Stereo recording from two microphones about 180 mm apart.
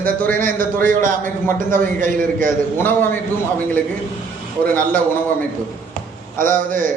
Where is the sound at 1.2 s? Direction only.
10° left (ahead or behind).